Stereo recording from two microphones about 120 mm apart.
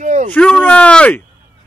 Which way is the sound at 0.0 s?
90° right.